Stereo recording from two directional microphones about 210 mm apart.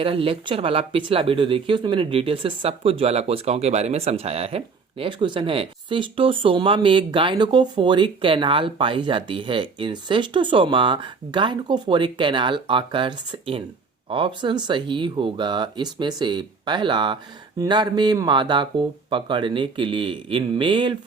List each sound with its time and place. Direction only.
0.0 s speech: 25° right (ahead or behind)